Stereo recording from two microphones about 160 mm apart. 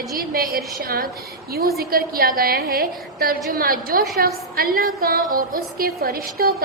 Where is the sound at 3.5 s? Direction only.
65° right (ahead or behind).